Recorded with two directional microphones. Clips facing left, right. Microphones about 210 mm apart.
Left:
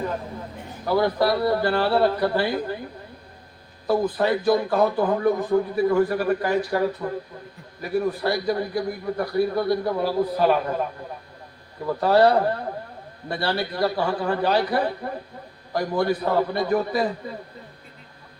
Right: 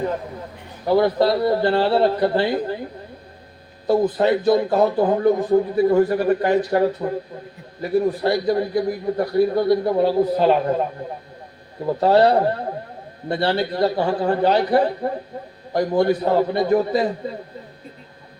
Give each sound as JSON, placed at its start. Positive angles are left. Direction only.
{"t": 0.9, "sound": "a man's voice", "side_deg": -25}
{"t": 3.8, "sound": "a man's voice", "side_deg": -25}
{"t": 11.9, "sound": "a man's voice", "side_deg": -25}